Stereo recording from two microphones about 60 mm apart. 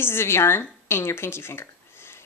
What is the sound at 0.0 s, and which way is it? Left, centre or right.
Speech, left.